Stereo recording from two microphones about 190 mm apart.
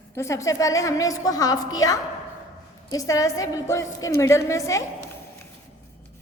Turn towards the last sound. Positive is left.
turn(degrees=15)  # may be behind; listen again after turning